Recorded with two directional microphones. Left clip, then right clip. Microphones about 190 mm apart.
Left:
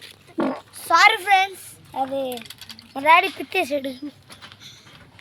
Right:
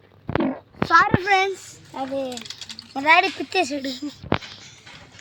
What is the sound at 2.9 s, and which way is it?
Speech, 30° left (ahead or behind).